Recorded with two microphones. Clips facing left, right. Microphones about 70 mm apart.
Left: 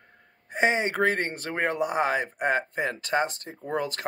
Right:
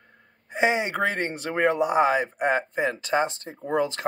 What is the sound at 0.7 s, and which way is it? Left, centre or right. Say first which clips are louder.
Speech: left 1 dB; left.